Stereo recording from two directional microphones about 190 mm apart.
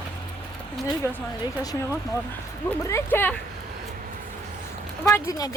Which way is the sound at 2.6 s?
15° left (ahead or behind).